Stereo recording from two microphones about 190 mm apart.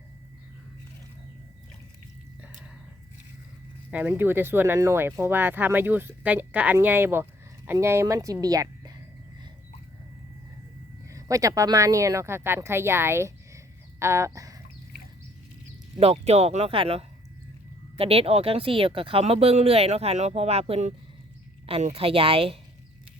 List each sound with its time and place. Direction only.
3.9 s speech: 10° right (ahead or behind)
11.1 s speech: 15° right (ahead or behind)
16.0 s speech: 35° right (ahead or behind)